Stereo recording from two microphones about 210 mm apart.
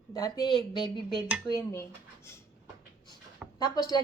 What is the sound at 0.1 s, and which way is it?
A woman's voice, 15° left (ahead or behind).